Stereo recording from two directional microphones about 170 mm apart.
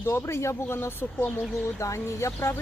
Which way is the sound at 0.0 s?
15° left (ahead or behind).